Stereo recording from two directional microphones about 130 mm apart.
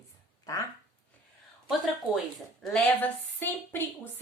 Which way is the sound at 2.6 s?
10° left (ahead or behind).